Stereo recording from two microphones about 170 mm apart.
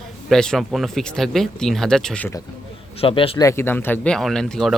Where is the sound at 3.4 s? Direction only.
15° left (ahead or behind).